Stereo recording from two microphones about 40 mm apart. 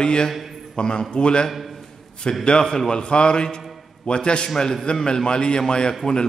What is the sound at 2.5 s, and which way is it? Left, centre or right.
A man's voice, centre.